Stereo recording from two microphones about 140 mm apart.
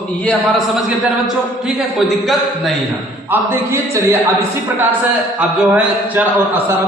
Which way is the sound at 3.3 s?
20° right (ahead or behind).